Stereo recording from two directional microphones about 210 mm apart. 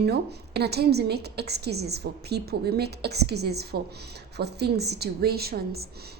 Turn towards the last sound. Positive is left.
turn(degrees=-50)  # may be behind; listen again after turning